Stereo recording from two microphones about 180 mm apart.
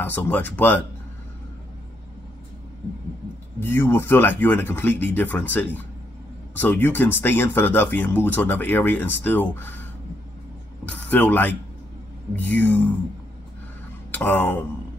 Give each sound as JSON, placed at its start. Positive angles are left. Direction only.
{"t": 0.0, "sound": "speech", "side_deg": 10}
{"t": 3.5, "sound": "speech", "side_deg": 10}
{"t": 10.9, "sound": "speech", "side_deg": 10}
{"t": 14.1, "sound": "speech", "side_deg": 10}